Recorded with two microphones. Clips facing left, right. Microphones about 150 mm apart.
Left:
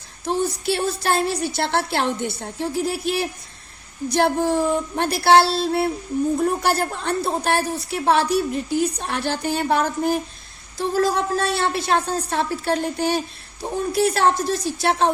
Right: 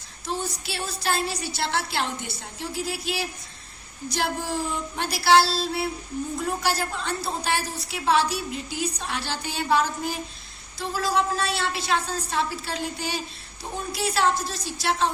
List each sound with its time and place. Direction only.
0.3 s a woman's voice: 55° left (ahead or behind)